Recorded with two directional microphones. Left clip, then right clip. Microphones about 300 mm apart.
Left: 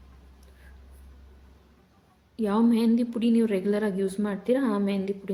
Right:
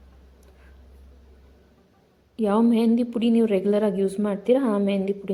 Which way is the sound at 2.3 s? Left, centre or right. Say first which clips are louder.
Right 4 dB; centre.